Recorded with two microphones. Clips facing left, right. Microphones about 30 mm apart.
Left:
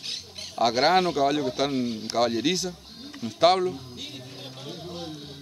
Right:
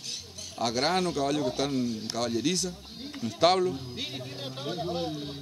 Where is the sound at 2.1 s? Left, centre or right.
Left.